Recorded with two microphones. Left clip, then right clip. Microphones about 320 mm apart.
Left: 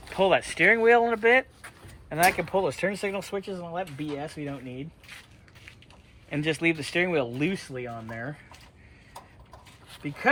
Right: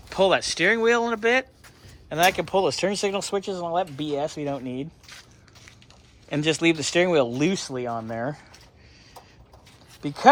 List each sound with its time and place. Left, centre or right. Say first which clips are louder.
0.1 s speech: right 2 dB; centre
6.3 s speech: right 4 dB; centre
8.2 s a sound: right 7 dB; centre